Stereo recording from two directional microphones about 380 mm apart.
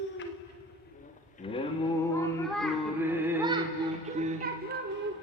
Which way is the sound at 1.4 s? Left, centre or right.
Centre.